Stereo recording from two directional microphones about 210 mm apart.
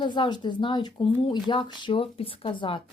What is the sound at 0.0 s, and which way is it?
Speech, 20° left (ahead or behind).